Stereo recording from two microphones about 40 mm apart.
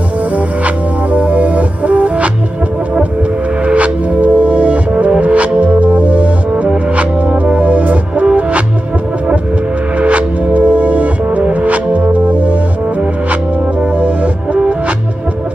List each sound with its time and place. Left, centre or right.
0.7 s music: right
3.6 s music: right
9.9 s music: right
13.9 s music: right